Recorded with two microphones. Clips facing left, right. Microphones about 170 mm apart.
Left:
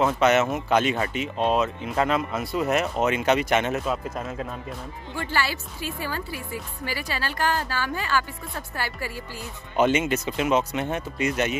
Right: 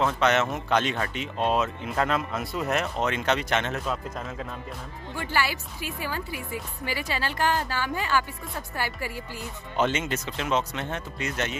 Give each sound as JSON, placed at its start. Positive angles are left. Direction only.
{"t": 0.0, "sound": "speech", "side_deg": 5}
{"t": 5.3, "sound": "a woman's voice", "side_deg": -15}
{"t": 9.8, "sound": "speech", "side_deg": 10}